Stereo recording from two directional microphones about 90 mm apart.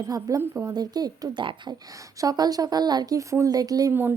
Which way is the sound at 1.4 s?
65° right (ahead or behind).